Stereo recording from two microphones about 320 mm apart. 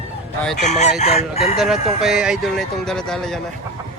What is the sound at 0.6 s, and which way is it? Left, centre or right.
Chicken, left.